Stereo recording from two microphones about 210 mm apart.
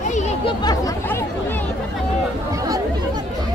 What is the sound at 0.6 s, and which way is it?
Chatter, 15° left (ahead or behind).